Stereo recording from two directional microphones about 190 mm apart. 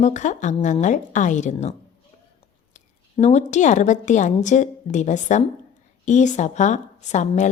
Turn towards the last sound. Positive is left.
turn(degrees=40)  # may be behind; listen again after turning